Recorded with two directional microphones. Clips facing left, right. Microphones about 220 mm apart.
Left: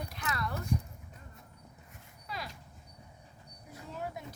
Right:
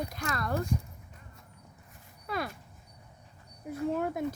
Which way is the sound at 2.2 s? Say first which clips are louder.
Right 8 dB; 55° right (ahead or behind).